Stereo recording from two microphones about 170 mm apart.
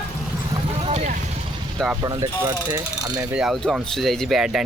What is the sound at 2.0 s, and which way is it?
Speech, 25° right (ahead or behind).